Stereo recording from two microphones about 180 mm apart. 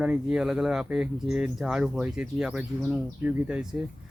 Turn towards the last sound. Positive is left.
turn(degrees=-5)  # may be behind; listen again after turning